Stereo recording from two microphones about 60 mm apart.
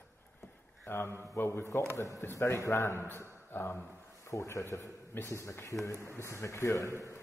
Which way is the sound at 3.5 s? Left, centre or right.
Left.